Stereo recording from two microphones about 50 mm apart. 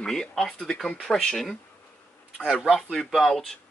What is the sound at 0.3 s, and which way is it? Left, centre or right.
Speech, centre.